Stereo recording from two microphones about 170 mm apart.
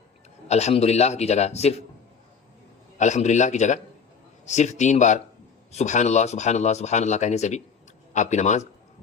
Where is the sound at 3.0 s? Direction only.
45° left (ahead or behind).